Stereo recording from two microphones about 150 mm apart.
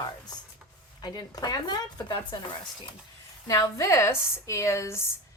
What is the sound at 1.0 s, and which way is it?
A woman's voice, 25° left (ahead or behind).